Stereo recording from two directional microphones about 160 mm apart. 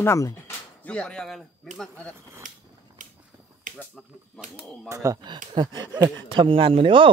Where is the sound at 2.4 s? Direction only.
55° right (ahead or behind).